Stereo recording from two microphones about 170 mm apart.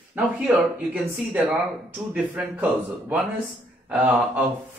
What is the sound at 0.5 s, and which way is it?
A man's voice, 5° right (ahead or behind).